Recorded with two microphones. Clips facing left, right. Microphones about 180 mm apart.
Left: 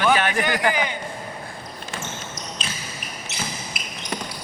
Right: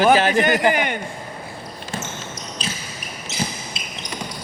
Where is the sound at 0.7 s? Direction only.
60° right (ahead or behind).